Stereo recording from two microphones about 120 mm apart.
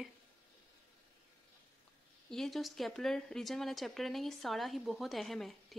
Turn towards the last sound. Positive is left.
turn(degrees=0)  # may be behind; listen again after turning